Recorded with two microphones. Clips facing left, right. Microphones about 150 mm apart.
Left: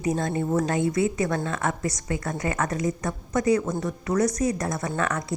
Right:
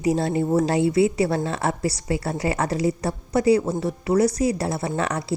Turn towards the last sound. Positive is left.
turn(degrees=-30)  # may be behind; listen again after turning